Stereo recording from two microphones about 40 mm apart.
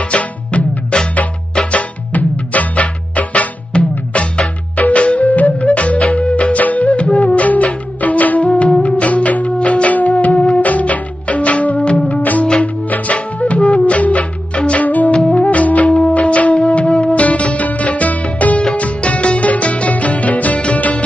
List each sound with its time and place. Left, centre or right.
0.0 s music: left
1.8 s music: left
5.9 s music: left
6.3 s music: left
7.1 s music: centre
7.3 s music: left
12.2 s music: left
15.1 s music: centre
15.4 s music: left